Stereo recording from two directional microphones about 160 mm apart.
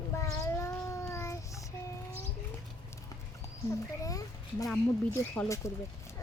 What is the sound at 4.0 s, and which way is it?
Speech, 20° left (ahead or behind).